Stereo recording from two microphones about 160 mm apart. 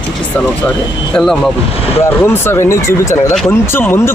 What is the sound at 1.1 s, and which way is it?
Speech, 5° left (ahead or behind).